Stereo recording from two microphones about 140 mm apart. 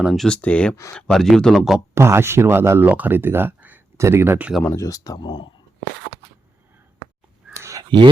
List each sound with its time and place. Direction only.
0.0 s speech: centre (ahead or behind)
2.0 s speech: 20° right (ahead or behind)
4.6 s speech: 20° left (ahead or behind)
7.5 s a sound: 20° right (ahead or behind)
7.9 s speech: 35° right (ahead or behind)